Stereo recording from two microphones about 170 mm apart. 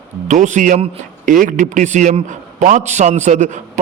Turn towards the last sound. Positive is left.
turn(degrees=-45)  # may be behind; listen again after turning